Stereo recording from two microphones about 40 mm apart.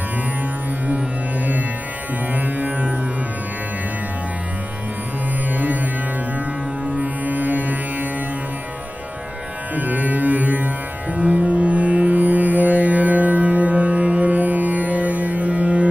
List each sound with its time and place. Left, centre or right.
2.3 s music: right
5.5 s music: right
7.0 s music: right
9.8 s music: right